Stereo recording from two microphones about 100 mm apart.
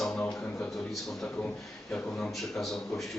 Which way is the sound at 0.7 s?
5° left (ahead or behind).